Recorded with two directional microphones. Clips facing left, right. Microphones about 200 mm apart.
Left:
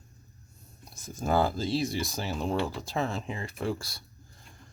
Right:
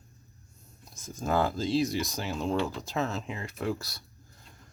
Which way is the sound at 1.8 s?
30° left (ahead or behind).